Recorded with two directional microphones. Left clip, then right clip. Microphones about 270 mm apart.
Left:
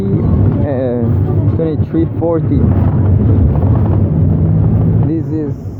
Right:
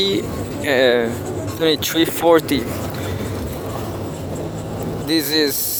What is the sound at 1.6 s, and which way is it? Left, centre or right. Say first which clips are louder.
Speech: right 2 dB; right.